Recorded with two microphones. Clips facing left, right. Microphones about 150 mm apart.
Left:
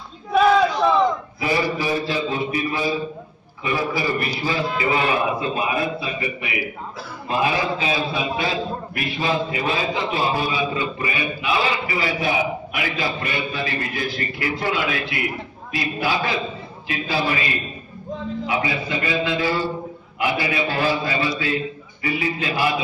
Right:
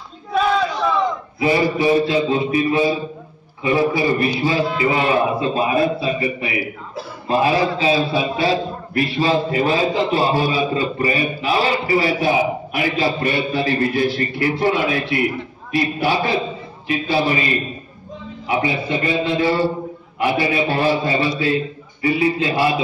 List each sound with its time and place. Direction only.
1.4 s a man's voice: 25° right (ahead or behind)
18.5 s a man's voice: 25° right (ahead or behind)